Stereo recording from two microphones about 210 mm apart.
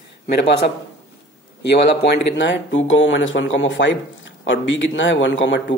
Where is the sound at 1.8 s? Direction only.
55° left (ahead or behind).